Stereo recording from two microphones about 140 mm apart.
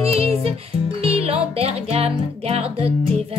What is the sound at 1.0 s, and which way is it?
Music, 45° right (ahead or behind).